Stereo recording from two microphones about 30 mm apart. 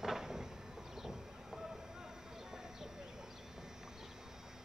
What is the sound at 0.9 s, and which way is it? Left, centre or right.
Train, centre.